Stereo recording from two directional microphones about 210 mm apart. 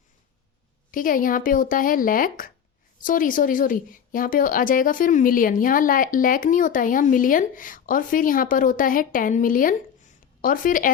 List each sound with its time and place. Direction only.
0.9 s a woman's voice: 40° left (ahead or behind)